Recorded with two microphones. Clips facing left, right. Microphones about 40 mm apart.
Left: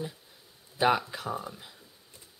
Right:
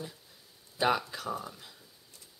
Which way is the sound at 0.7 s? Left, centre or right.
Centre.